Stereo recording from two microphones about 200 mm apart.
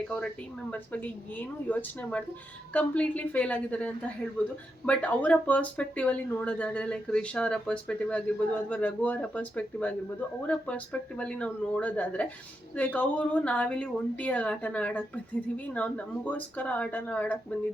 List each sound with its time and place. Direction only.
0.7 s a woman's voice: 5° left (ahead or behind)